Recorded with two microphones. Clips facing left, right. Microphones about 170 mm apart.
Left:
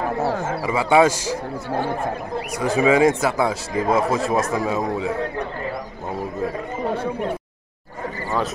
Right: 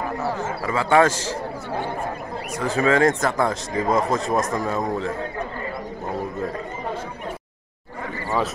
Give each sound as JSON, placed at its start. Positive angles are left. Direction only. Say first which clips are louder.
{"t": 0.2, "sound": "speech", "louder": "left 3 dB", "side_deg": 65}
{"t": 0.7, "sound": "speech", "louder": "left 2 dB", "side_deg": 10}
{"t": 2.5, "sound": "a man's voice", "louder": "left 3 dB", "side_deg": 10}